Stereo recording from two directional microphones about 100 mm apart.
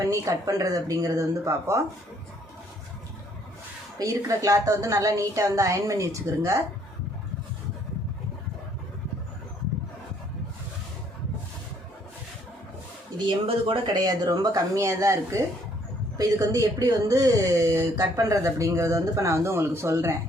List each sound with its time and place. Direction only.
0.0 s speech: 35° right (ahead or behind)
3.9 s speech: 35° right (ahead or behind)
13.8 s speech: 40° right (ahead or behind)